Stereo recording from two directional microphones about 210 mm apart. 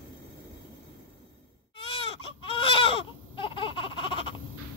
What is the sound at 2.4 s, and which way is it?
Baby cry, 25° left (ahead or behind).